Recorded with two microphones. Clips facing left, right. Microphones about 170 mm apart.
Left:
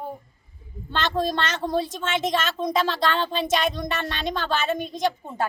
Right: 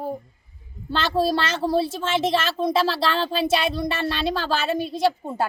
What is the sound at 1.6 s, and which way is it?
Speech, 35° right (ahead or behind).